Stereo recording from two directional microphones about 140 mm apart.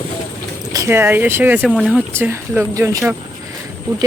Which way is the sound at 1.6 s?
5° right (ahead or behind).